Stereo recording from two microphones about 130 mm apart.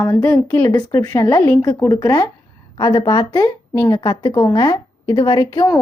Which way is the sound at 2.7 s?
40° left (ahead or behind).